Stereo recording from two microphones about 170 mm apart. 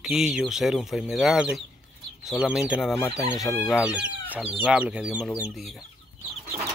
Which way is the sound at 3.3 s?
Centre (ahead or behind).